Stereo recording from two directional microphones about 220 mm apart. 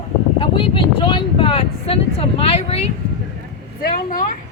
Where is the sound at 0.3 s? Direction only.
25° left (ahead or behind).